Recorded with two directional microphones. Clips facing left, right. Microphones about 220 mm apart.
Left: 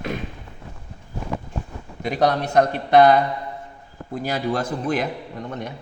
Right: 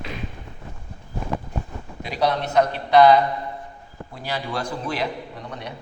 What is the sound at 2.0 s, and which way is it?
A man's voice, 50° left (ahead or behind).